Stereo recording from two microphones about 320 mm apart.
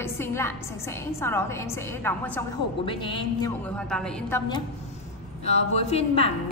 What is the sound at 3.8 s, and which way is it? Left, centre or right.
Speech, centre.